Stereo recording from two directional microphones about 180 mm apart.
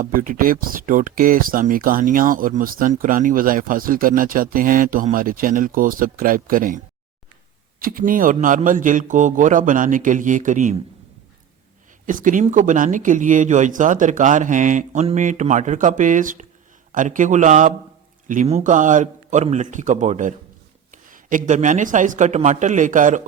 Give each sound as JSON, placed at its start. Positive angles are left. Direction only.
{"t": 0.0, "sound": "speech", "side_deg": -50}
{"t": 12.0, "sound": "speech", "side_deg": -45}